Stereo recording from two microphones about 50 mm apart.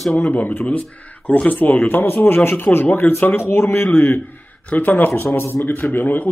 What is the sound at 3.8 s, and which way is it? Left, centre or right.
Speech, left.